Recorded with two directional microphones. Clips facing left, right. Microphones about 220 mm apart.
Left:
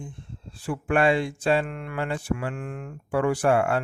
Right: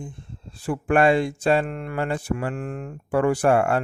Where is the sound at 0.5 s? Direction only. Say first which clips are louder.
Right 3 dB; 40° right (ahead or behind).